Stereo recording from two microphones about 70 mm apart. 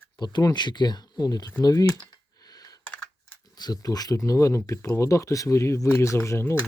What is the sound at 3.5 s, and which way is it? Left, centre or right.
Speech, left.